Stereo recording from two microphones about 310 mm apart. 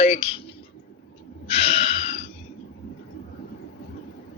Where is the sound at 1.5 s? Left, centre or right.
Centre.